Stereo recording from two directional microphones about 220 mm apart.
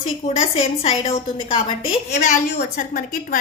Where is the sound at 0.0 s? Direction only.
25° left (ahead or behind).